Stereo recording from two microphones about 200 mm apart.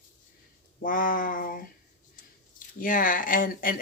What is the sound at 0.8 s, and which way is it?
Speech, 45° left (ahead or behind).